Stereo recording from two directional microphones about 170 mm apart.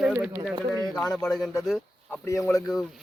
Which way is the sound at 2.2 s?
20° left (ahead or behind).